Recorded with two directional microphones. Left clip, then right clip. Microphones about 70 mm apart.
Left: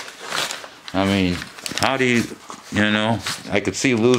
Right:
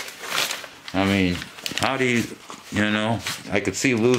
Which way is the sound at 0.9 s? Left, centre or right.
Left.